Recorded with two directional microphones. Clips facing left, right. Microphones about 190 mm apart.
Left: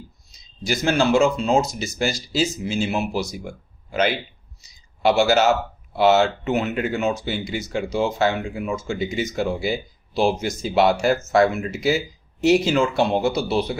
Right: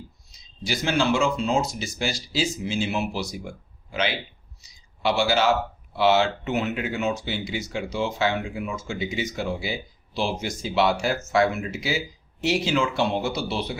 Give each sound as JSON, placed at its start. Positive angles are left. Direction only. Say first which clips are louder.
{"t": 0.3, "sound": "speech", "louder": "left 4 dB", "side_deg": 45}
{"t": 4.6, "sound": "speech", "louder": "left 6 dB", "side_deg": 45}